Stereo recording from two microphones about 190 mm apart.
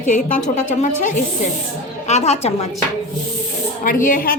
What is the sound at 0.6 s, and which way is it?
Speech, 40° left (ahead or behind).